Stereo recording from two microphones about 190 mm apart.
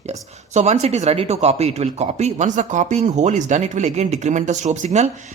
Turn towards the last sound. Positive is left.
turn(degrees=-35)  # may be behind; listen again after turning